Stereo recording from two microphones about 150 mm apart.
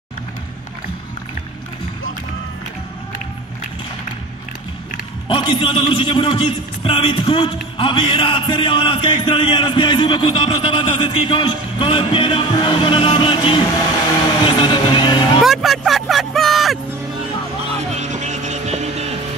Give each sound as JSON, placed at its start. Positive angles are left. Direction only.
{"t": 5.3, "sound": "a man's voice", "side_deg": 35}
{"t": 15.4, "sound": "speech", "side_deg": 0}
{"t": 17.9, "sound": "vehicle", "side_deg": -50}